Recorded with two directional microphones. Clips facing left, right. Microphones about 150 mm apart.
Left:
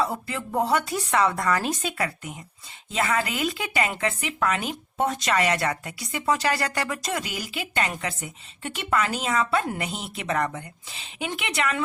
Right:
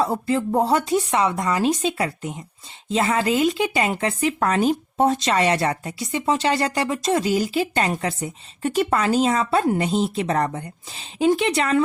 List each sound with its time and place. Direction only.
0.0 s speech: 35° right (ahead or behind)